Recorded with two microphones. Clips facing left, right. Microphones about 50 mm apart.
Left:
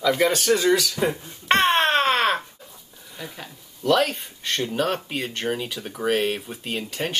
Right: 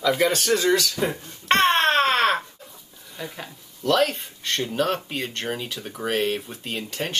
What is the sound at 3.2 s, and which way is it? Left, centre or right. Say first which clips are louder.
Speech: right 2 dB; centre.